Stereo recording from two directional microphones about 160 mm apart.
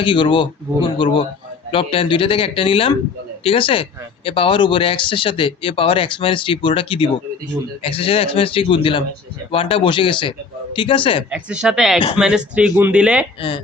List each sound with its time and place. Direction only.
0.0 s speech: 30° left (ahead or behind)
11.3 s speech: 5° right (ahead or behind)